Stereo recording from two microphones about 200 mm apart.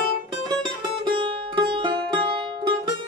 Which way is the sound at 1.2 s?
25° right (ahead or behind).